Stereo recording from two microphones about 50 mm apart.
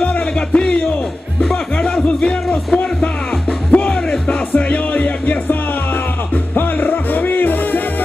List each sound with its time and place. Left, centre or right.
0.0 s music: left
1.4 s music: centre
2.0 s music: centre; by 7.8 s left